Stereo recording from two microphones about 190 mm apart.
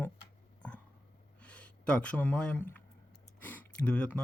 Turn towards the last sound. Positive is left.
turn(degrees=5)  # may be behind; listen again after turning